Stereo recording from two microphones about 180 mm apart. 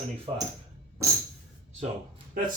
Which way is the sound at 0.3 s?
30° right (ahead or behind).